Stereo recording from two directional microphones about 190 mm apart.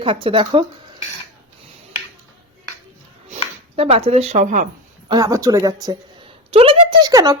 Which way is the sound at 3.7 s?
30° right (ahead or behind).